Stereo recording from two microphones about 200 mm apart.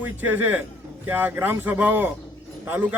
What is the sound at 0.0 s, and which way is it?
Speech, 10° right (ahead or behind).